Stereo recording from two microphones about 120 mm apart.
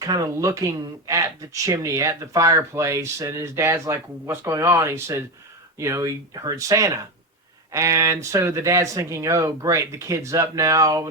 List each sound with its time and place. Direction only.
0.0 s speech: 30° right (ahead or behind)